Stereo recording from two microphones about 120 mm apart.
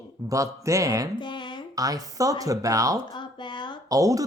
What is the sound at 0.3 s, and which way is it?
Speech, 25° right (ahead or behind).